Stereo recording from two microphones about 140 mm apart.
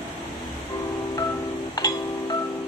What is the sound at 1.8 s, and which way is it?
Music, 30° left (ahead or behind).